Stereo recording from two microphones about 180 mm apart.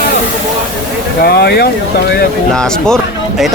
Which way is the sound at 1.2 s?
60° left (ahead or behind).